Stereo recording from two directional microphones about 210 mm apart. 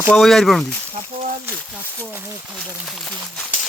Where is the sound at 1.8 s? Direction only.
10° right (ahead or behind).